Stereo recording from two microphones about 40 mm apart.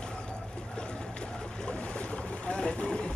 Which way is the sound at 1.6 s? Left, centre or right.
Left.